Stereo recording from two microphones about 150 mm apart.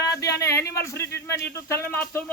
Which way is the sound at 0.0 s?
25° left (ahead or behind).